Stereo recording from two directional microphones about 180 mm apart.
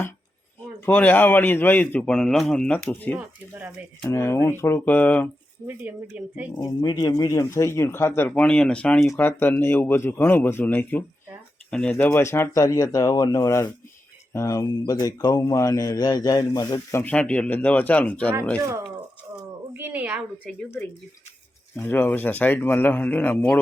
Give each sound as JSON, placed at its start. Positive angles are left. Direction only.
{"t": 0.9, "sound": "speech", "side_deg": 10}
{"t": 3.2, "sound": "speech", "side_deg": -10}
{"t": 4.1, "sound": "speech", "side_deg": 15}
{"t": 5.6, "sound": "speech", "side_deg": -10}
{"t": 6.6, "sound": "speech", "side_deg": 25}
{"t": 17.0, "sound": "speech", "side_deg": 5}
{"t": 19.7, "sound": "a woman's voice", "side_deg": -10}
{"t": 20.4, "sound": "speech", "side_deg": 10}